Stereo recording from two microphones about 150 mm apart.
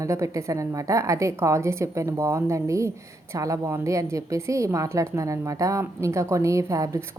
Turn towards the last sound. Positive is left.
turn(degrees=-20)  # may be behind; listen again after turning